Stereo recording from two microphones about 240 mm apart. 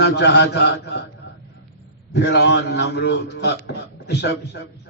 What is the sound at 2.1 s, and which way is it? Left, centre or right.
A man's voice, left.